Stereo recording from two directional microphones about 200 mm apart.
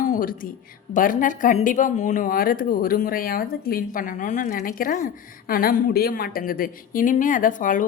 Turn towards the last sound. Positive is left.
turn(degrees=40)  # may be behind; listen again after turning